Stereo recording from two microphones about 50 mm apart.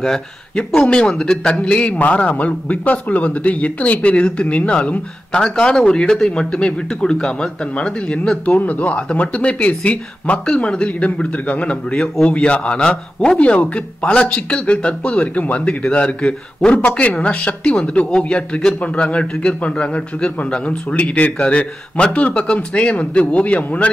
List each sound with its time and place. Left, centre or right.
0.0 s speech: centre
8.5 s speech: left
10.4 s speech: centre